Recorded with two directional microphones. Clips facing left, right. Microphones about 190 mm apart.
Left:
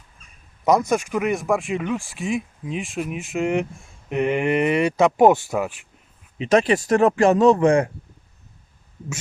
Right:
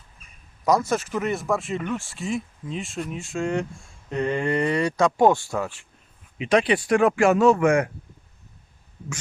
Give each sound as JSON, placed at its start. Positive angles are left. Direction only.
{"t": 0.6, "sound": "speech", "side_deg": 20}
{"t": 6.4, "sound": "speech", "side_deg": 45}